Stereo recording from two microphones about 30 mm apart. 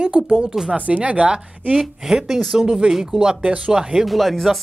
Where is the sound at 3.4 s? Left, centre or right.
Right.